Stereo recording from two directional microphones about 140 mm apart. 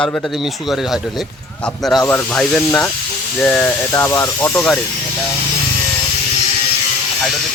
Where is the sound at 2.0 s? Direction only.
15° left (ahead or behind).